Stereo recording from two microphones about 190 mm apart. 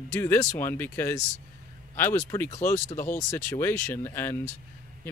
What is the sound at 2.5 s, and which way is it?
Speech, 40° left (ahead or behind).